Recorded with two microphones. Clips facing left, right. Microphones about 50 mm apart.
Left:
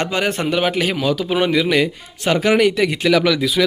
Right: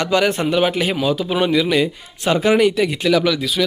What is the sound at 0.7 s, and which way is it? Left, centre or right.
Speech, left.